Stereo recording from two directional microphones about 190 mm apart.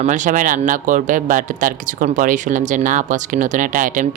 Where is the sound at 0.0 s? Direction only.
45° right (ahead or behind).